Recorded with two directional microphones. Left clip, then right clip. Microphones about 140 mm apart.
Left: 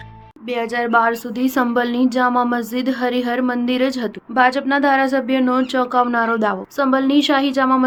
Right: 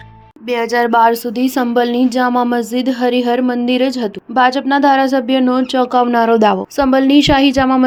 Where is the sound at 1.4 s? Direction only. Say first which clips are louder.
Right 4 dB; 15° right (ahead or behind).